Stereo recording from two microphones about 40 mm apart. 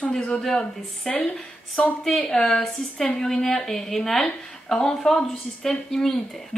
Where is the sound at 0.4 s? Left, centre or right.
Centre.